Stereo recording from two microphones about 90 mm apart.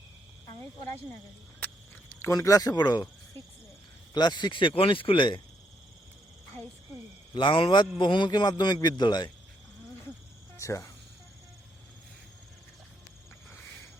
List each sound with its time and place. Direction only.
1.6 s a sound: 20° left (ahead or behind)
2.2 s speech: 35° left (ahead or behind)
4.1 s speech: 50° left (ahead or behind); by 5.4 s 65° left (ahead or behind)
7.3 s a man's voice: 65° left (ahead or behind)
10.6 s speech: 35° left (ahead or behind)